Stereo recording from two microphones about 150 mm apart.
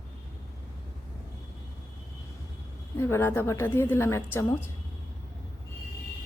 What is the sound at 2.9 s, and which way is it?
A woman's voice, 15° left (ahead or behind).